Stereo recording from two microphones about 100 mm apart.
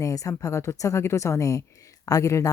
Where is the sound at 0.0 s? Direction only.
35° left (ahead or behind).